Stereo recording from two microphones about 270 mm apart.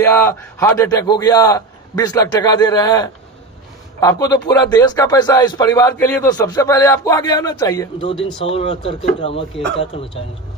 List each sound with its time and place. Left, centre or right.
0.0 s a man's voice: centre